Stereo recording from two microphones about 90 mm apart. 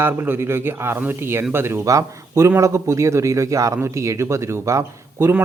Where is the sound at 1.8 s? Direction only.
40° right (ahead or behind).